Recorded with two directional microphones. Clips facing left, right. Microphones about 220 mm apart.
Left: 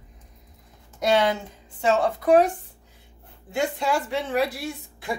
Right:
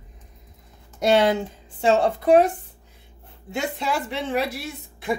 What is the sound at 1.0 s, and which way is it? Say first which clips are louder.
Speech: right 3 dB; 30° right (ahead or behind).